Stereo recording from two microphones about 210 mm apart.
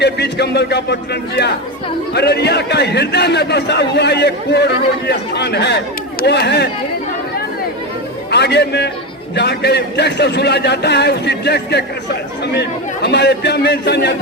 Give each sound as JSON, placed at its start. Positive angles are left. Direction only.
{"t": 0.0, "sound": "a man's voice", "side_deg": 50}
{"t": 2.1, "sound": "a man's voice", "side_deg": 50}
{"t": 8.3, "sound": "a man's voice", "side_deg": 55}